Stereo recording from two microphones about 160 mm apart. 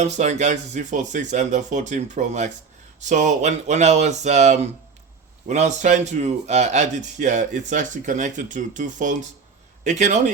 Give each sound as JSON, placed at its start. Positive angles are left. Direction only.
{"t": 0.0, "sound": "speech", "side_deg": -45}